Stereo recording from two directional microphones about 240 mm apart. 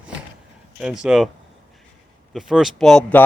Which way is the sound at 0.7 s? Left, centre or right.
Centre.